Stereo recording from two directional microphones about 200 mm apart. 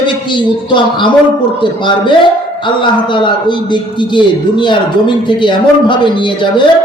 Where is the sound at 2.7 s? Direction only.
25° left (ahead or behind).